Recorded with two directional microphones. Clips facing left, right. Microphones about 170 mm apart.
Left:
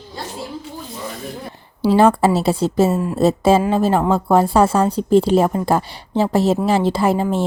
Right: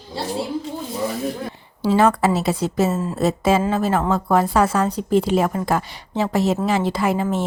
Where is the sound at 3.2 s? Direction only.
30° left (ahead or behind).